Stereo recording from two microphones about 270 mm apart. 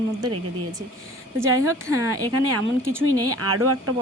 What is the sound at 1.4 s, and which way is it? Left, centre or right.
A woman's voice, right.